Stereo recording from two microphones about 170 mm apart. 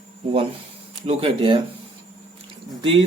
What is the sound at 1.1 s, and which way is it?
Speech, 35° right (ahead or behind).